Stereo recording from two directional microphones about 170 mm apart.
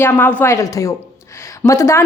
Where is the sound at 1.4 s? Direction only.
15° left (ahead or behind).